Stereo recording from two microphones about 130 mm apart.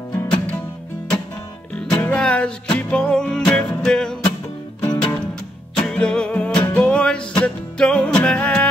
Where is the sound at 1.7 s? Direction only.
10° left (ahead or behind).